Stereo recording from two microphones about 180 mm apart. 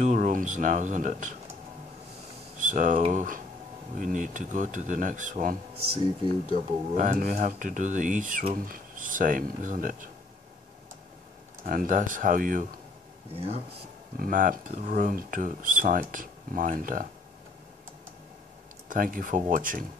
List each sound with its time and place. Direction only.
0.0 s speech: 45° right (ahead or behind)
2.6 s speech: 45° right (ahead or behind)
11.6 s speech: 50° right (ahead or behind)
13.3 s speech: 35° right (ahead or behind)
14.1 s speech: 50° right (ahead or behind)
18.9 s speech: 50° right (ahead or behind)